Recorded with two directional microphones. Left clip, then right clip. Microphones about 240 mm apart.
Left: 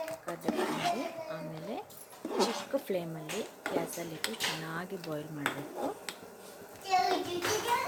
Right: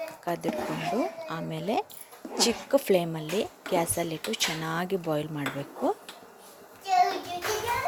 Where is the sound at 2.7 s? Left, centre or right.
Right.